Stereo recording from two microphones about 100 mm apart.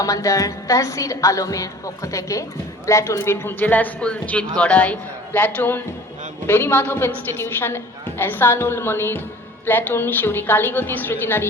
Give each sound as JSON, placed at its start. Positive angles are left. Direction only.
{"t": 0.0, "sound": "a woman's voice", "side_deg": 35}
{"t": 8.2, "sound": "a woman's voice", "side_deg": 20}